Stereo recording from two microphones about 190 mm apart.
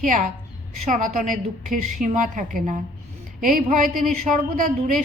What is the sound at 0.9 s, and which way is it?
A woman's voice, 45° right (ahead or behind).